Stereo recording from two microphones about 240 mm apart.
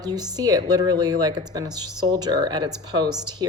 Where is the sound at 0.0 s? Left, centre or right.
Centre.